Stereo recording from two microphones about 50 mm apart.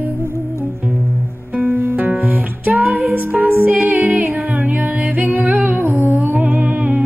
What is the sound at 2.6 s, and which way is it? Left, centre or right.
Music, right.